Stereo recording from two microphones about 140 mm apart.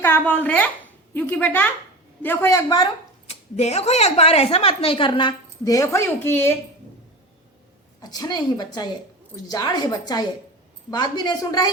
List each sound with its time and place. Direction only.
0.0 s speech: 15° left (ahead or behind)
2.6 s speech: 30° left (ahead or behind)
3.2 s a woman's voice: 50° left (ahead or behind)
5.6 s a woman's voice: 20° left (ahead or behind)
8.0 s a woman's voice: 30° left (ahead or behind)